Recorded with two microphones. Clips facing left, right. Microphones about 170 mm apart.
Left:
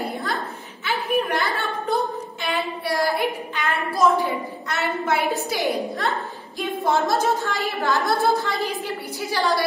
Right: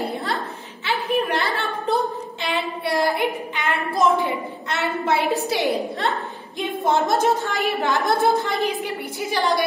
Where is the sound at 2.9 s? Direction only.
20° right (ahead or behind).